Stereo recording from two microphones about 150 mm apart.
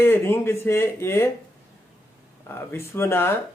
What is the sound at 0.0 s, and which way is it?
Speech, 15° left (ahead or behind).